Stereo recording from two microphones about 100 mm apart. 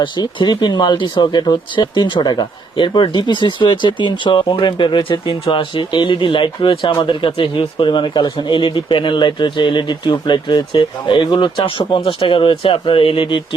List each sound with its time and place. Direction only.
0.0 s speech: 50° left (ahead or behind)